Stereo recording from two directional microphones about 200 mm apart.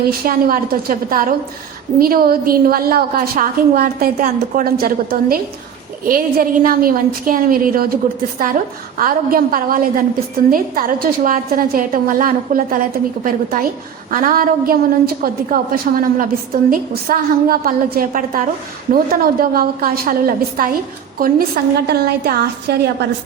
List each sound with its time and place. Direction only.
0.3 s a woman's voice: 45° right (ahead or behind)
9.0 s a woman's voice: 45° right (ahead or behind)